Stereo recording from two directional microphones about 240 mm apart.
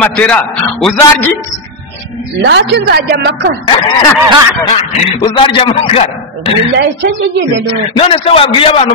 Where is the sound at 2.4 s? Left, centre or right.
Right.